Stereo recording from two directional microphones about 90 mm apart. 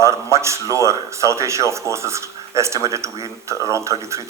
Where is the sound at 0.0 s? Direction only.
35° right (ahead or behind).